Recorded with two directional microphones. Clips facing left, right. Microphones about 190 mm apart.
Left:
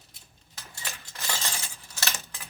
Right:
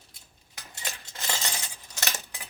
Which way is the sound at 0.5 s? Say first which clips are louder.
Right 1 dB; 15° right (ahead or behind).